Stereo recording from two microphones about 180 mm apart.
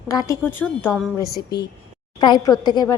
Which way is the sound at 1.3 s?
65° left (ahead or behind).